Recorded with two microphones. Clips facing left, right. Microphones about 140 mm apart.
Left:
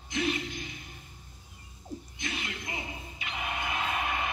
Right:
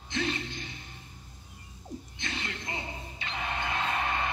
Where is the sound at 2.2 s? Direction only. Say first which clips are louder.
Even; 25° right (ahead or behind).